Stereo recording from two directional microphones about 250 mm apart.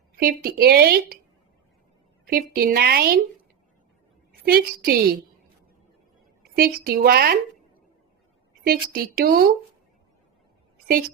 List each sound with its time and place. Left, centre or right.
0.2 s a woman's voice: right
2.2 s a woman's voice: right
4.4 s a woman's voice: right
6.6 s a woman's voice: right
8.6 s a woman's voice: right